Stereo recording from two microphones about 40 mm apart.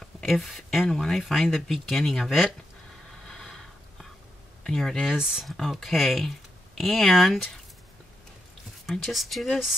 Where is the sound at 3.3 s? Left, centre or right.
Centre.